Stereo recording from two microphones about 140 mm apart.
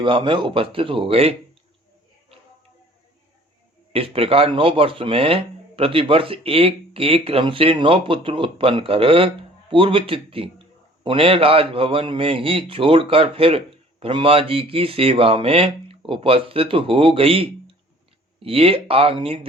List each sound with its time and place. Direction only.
0.0 s speech: 35° right (ahead or behind)
3.9 s speech: 40° right (ahead or behind)